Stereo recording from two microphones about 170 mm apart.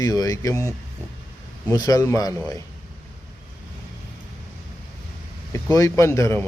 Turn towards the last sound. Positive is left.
turn(degrees=15)  # may be behind; listen again after turning